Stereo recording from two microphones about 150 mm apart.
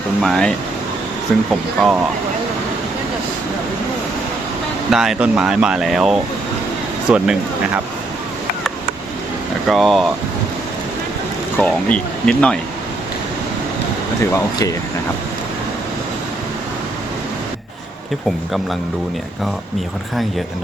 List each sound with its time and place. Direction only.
0.2 s speech: centre (ahead or behind)
4.9 s speech: 5° right (ahead or behind)
9.6 s speech: centre (ahead or behind)
11.5 s speech: 10° left (ahead or behind)
14.2 s speech: 20° left (ahead or behind)